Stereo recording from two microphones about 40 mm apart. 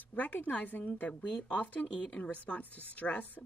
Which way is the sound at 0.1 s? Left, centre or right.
Left.